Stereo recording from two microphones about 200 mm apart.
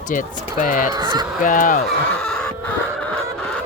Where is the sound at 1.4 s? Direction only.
40° left (ahead or behind).